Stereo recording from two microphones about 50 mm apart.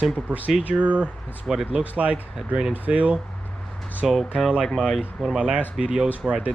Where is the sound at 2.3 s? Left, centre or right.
Centre.